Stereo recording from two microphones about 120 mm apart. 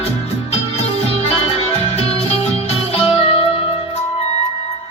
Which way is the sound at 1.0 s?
55° left (ahead or behind).